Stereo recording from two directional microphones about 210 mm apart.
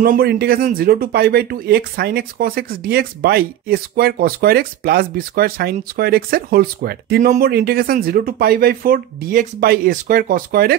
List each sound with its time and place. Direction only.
0.0 s speech: 45° right (ahead or behind)